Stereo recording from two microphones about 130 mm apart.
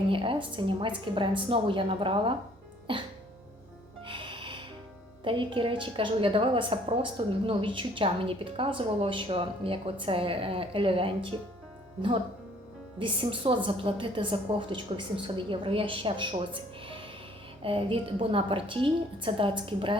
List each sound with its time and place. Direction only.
0.1 s a woman's voice: 40° right (ahead or behind)
4.0 s music: 40° right (ahead or behind)
5.2 s a woman's voice: 40° right (ahead or behind)
13.0 s a woman's voice: 40° right (ahead or behind)